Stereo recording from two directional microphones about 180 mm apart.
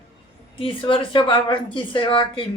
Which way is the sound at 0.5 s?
30° left (ahead or behind).